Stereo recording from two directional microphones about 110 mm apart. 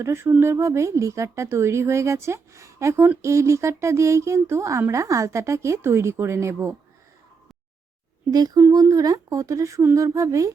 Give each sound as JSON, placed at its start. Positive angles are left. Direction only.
{"t": 0.0, "sound": "speech", "side_deg": -25}
{"t": 8.3, "sound": "speech", "side_deg": -35}